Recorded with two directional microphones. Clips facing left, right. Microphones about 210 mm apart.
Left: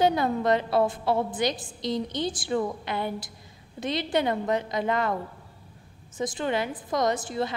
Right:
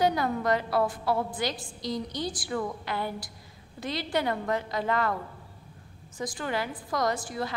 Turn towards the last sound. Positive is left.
turn(degrees=25)  # may be behind; listen again after turning